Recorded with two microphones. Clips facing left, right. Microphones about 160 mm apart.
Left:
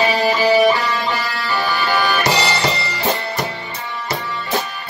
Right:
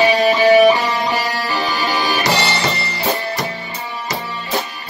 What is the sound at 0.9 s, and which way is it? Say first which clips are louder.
Music: right 2 dB; 20° right (ahead or behind).